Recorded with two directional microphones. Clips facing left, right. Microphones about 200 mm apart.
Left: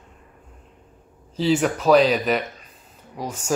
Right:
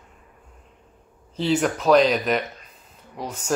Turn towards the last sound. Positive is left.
turn(degrees=10)  # may be behind; listen again after turning